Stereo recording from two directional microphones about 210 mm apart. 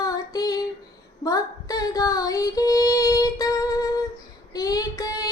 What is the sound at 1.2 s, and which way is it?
Female singing, 15° left (ahead or behind).